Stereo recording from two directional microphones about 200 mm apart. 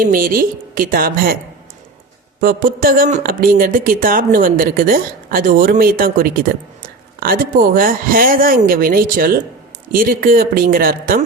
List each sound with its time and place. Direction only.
0.0 s speech: 45° right (ahead or behind)
2.4 s speech: 45° right (ahead or behind)